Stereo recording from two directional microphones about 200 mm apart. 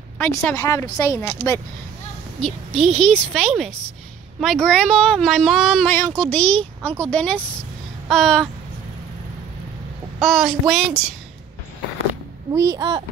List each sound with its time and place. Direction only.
0.2 s speech: 10° left (ahead or behind)
2.4 s speech: 5° left (ahead or behind)
10.2 s speech: centre (ahead or behind)
12.5 s speech: 20° right (ahead or behind)